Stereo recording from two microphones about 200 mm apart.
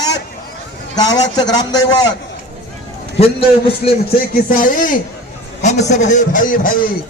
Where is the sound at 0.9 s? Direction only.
20° left (ahead or behind).